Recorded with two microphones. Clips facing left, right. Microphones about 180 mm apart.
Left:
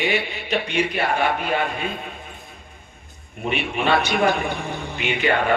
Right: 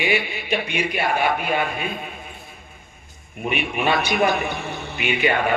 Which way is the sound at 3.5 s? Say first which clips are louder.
Left 1 dB; 15° right (ahead or behind).